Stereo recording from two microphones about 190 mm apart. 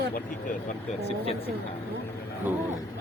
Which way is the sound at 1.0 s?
30° left (ahead or behind).